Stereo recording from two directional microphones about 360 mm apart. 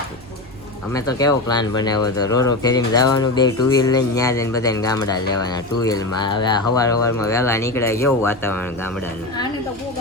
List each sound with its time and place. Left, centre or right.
0.9 s speech: centre